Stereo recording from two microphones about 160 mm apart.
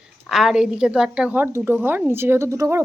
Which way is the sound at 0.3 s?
5° right (ahead or behind).